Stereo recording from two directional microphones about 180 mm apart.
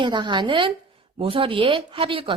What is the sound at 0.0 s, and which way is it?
Speech, 25° right (ahead or behind).